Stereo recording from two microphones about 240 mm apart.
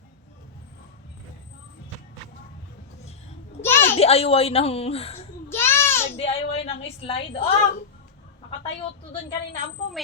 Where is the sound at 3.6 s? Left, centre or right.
Centre.